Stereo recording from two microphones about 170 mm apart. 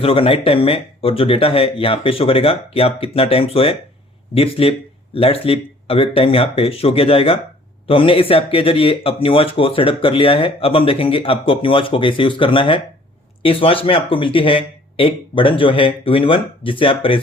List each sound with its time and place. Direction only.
0.0 s speech: 35° left (ahead or behind)